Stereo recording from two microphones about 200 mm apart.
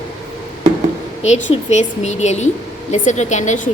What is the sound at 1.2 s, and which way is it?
Speech, 35° left (ahead or behind).